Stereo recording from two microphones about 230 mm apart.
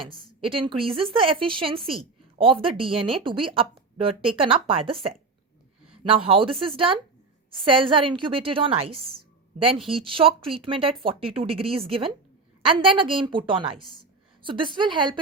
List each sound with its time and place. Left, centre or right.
0.1 s a woman's voice: right